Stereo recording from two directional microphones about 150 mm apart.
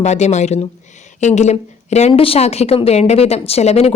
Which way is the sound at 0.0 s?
50° left (ahead or behind).